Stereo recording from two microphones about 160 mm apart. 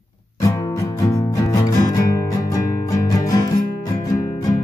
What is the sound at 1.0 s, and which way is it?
Music, 20° left (ahead or behind).